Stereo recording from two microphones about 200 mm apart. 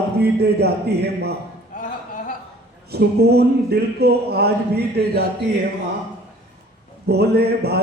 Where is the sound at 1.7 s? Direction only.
45° left (ahead or behind).